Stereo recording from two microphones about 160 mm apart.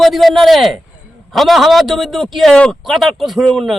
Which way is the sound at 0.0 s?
Centre (ahead or behind).